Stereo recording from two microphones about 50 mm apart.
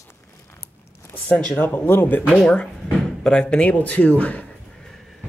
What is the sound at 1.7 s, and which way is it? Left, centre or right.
Speech, left.